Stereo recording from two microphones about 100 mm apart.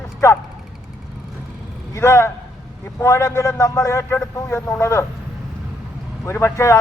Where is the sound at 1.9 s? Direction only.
25° left (ahead or behind).